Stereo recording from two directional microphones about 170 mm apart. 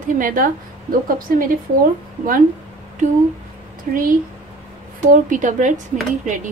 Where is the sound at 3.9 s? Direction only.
55° right (ahead or behind).